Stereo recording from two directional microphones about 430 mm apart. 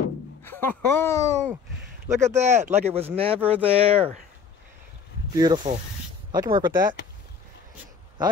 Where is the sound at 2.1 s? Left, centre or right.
Centre.